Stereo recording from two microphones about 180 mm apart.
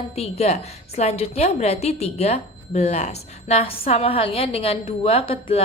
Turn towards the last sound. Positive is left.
turn(degrees=30)  # may be behind; listen again after turning